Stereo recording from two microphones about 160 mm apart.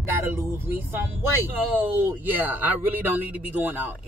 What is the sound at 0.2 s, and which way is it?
Speech, 15° right (ahead or behind).